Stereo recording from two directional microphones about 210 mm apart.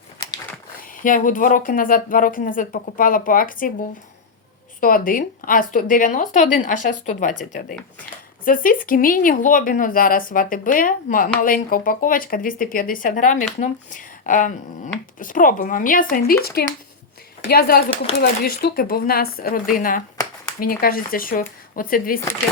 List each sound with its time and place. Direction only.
0.8 s a woman's voice: 40° left (ahead or behind)